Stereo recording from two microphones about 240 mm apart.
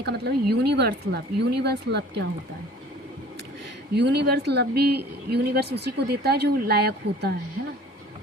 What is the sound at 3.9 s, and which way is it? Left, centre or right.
A woman's voice, right.